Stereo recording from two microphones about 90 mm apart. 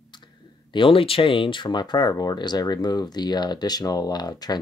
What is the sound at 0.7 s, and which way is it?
Speech, 80° left.